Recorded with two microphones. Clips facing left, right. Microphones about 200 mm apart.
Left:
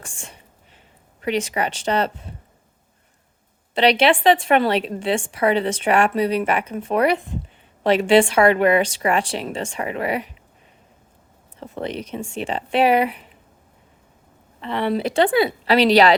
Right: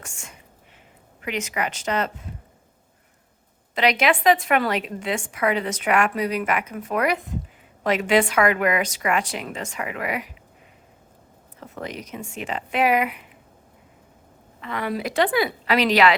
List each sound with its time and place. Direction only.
0.0 s speech: 30° left (ahead or behind)
3.8 s a woman's voice: 30° left (ahead or behind)
11.6 s speech: 30° left (ahead or behind)
14.6 s a woman's voice: 30° left (ahead or behind)